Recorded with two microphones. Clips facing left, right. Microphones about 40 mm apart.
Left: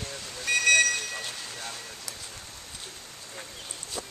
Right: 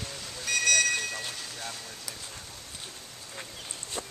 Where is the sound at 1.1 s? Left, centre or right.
Centre.